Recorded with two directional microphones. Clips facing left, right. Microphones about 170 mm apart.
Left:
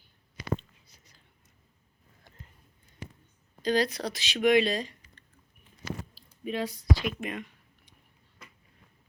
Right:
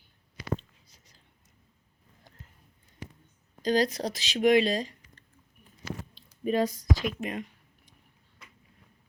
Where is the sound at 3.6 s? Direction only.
40° right (ahead or behind).